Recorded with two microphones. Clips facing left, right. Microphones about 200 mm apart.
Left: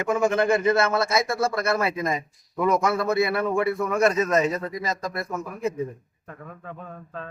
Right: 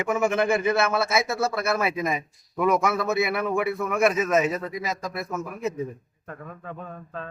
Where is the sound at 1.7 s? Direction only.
20° right (ahead or behind).